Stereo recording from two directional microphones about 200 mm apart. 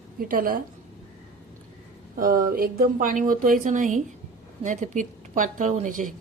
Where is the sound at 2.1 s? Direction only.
45° right (ahead or behind).